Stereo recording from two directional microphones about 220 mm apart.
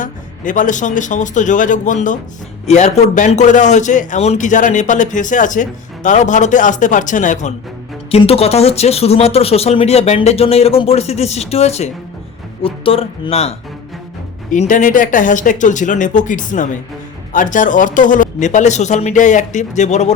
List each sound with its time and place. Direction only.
0.0 s a man's voice: 35° left (ahead or behind)